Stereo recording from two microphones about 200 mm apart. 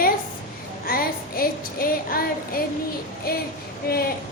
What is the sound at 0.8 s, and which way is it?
Child singing, 50° left (ahead or behind).